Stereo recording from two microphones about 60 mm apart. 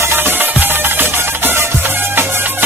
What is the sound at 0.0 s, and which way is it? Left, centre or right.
Music, right.